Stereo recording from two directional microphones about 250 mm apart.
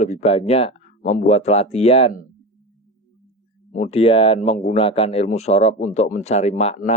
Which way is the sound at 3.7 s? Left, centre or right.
Left.